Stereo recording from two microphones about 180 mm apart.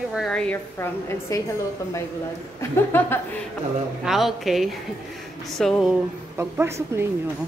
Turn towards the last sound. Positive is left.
turn(degrees=-15)  # may be behind; listen again after turning